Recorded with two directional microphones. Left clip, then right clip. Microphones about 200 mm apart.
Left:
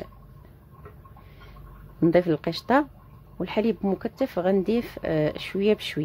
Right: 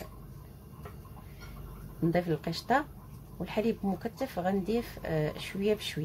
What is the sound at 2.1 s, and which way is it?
Speech, 50° left (ahead or behind).